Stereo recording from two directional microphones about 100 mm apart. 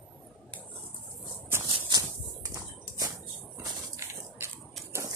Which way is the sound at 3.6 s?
30° right (ahead or behind).